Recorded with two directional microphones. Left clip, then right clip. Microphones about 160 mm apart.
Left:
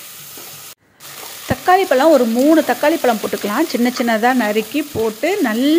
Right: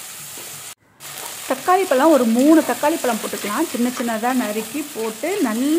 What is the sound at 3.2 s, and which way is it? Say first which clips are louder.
Sizzle: left 4 dB; 20° left (ahead or behind).